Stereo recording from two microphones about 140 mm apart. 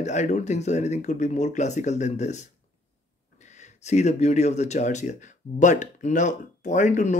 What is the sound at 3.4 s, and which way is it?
Speech, 55° left (ahead or behind).